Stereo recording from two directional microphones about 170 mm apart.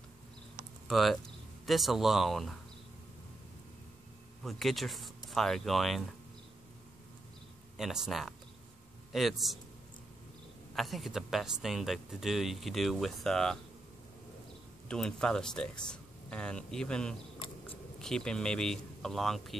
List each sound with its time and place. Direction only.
0.8 s speech: centre (ahead or behind)
4.4 s speech: centre (ahead or behind)
7.7 s speech: centre (ahead or behind)
10.7 s speech: centre (ahead or behind)
14.9 s speech: 5° left (ahead or behind)
17.4 s scissors: 30° left (ahead or behind)
17.9 s speech: 5° left (ahead or behind)